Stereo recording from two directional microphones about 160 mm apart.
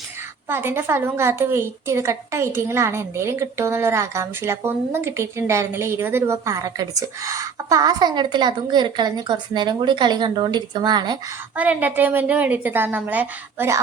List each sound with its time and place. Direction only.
0.4 s a woman's voice: 15° right (ahead or behind)
11.5 s a woman's voice: 10° right (ahead or behind)